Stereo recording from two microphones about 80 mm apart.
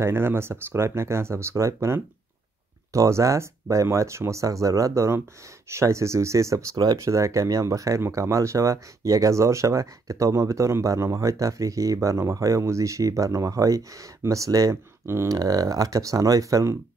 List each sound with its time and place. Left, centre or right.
0.0 s speech: right